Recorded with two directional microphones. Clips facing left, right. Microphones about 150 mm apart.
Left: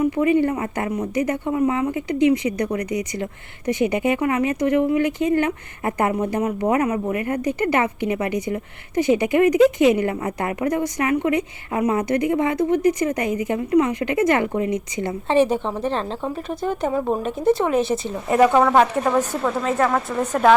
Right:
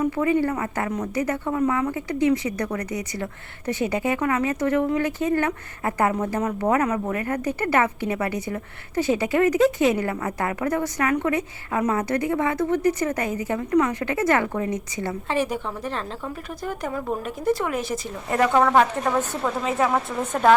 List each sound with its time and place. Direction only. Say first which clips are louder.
0.0 s a woman's voice: left 3 dB; 15° left (ahead or behind)
19.0 s speech: left 3 dB; centre (ahead or behind)